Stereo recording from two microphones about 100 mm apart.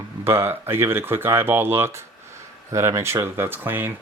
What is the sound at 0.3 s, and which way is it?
Speech, 25° right (ahead or behind).